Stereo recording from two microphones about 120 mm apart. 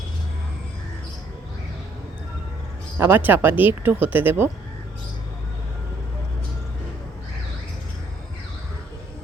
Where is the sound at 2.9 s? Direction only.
20° right (ahead or behind).